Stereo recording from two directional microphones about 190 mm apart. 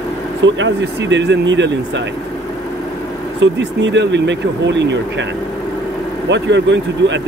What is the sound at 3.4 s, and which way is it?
Speech, 70° right (ahead or behind).